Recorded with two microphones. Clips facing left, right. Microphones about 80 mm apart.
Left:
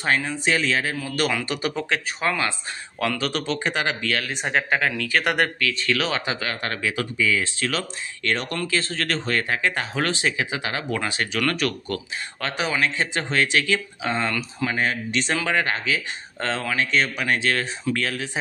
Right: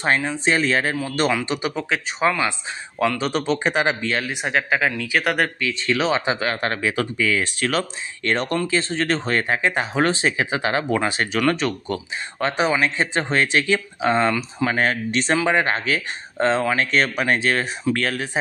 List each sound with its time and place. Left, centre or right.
0.0 s speech: right
0.6 s speech: right
0.9 s speech: right
3.2 s speech: right
4.3 s a man's voice: centre
5.6 s speech: right
7.2 s speech: right
15.3 s speech: right
15.7 s speech: right
16.3 s speech: right
16.8 s speech: right
17.9 s speech: right